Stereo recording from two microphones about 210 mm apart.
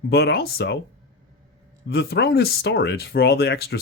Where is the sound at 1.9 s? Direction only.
50° left (ahead or behind).